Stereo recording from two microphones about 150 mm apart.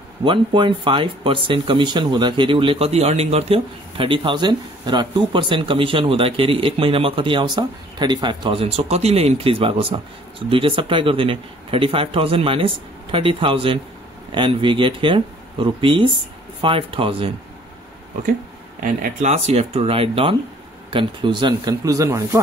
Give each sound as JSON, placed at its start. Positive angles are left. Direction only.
{"t": 0.2, "sound": "speech", "side_deg": -35}
{"t": 18.8, "sound": "speech", "side_deg": -65}
{"t": 19.3, "sound": "speech", "side_deg": -45}